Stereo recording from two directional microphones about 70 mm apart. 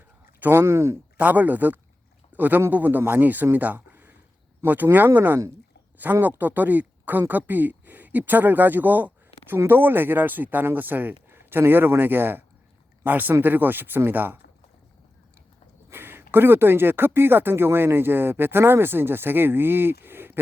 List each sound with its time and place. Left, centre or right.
0.3 s a sound: right
0.6 s speech: right
1.1 s a man's voice: right
15.9 s speech: right